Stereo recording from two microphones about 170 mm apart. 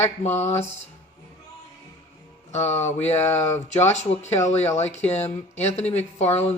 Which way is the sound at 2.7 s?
40° left (ahead or behind).